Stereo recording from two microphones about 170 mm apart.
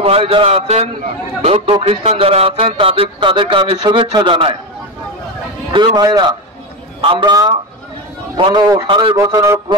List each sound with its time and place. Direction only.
0.0 s speech: 35° right (ahead or behind)
5.7 s a man's voice: 30° right (ahead or behind)
9.1 s a man's voice: 20° right (ahead or behind)